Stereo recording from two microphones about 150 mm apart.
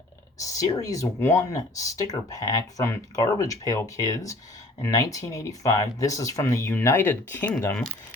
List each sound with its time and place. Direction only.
0.4 s speech: 20° left (ahead or behind)
7.7 s speech: 5° left (ahead or behind)